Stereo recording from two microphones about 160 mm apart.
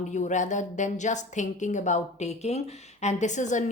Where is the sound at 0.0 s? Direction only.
50° left (ahead or behind).